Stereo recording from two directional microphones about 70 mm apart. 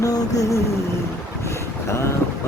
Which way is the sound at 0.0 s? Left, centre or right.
Left.